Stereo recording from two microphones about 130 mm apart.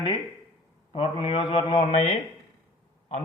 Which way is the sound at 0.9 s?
45° left (ahead or behind).